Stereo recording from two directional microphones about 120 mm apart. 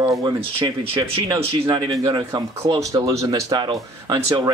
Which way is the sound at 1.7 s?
35° right (ahead or behind).